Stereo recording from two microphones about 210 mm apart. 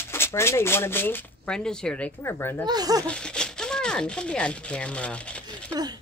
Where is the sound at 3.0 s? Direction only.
5° left (ahead or behind).